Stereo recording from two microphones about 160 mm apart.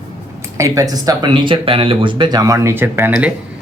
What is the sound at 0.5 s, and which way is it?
Speech, 20° right (ahead or behind).